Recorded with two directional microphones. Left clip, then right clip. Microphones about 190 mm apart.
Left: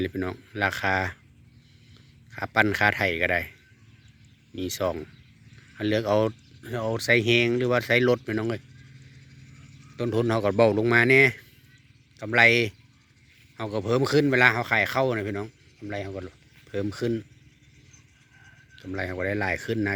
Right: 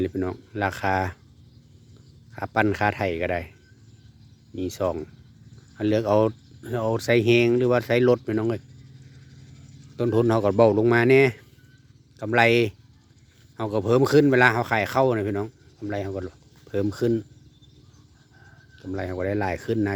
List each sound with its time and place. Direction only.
0.0 s speech: 5° right (ahead or behind)
2.3 s a man's voice: 5° right (ahead or behind)
4.5 s a man's voice: 5° right (ahead or behind)
10.0 s speech: 15° right (ahead or behind)
18.8 s speech: 5° right (ahead or behind)